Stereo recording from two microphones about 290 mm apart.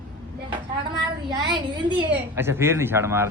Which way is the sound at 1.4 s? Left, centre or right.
Centre.